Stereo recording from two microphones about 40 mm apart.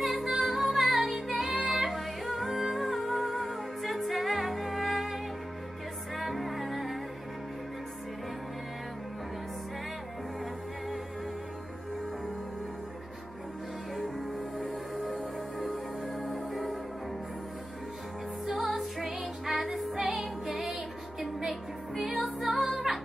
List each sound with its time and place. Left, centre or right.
0.0 s music: centre
1.9 s music: centre
15.7 s music: left
18.5 s music: centre